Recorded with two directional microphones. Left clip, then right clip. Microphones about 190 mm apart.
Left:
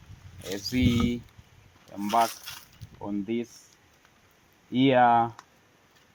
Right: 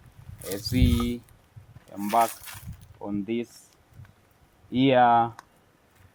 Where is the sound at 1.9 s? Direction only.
20° left (ahead or behind).